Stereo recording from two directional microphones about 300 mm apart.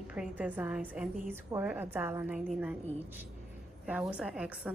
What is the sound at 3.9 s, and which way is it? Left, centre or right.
Speech, centre.